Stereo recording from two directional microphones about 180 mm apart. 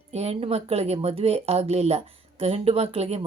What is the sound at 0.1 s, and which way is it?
Speech, 35° right (ahead or behind).